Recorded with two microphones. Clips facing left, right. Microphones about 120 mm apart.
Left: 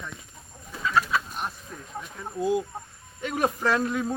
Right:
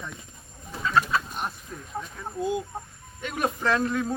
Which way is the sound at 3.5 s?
10° left (ahead or behind).